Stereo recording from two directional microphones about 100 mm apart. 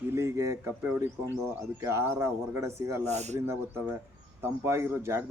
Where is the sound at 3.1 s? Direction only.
90° right.